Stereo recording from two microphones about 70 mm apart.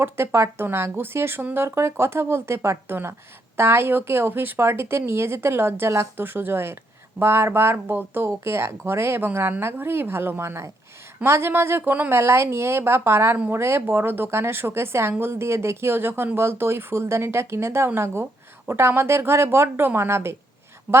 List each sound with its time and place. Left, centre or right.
0.0 s a woman's voice: right